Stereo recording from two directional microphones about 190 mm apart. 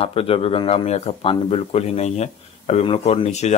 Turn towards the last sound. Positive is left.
turn(degrees=35)  # may be behind; listen again after turning